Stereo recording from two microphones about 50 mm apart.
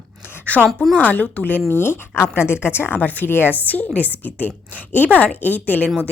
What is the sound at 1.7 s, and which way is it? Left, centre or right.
A woman's voice, left.